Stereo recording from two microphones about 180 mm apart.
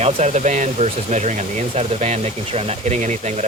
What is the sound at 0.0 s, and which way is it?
Speech, 40° right (ahead or behind).